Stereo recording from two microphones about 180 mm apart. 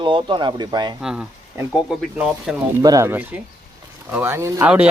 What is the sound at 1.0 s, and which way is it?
Speech, 5° right (ahead or behind).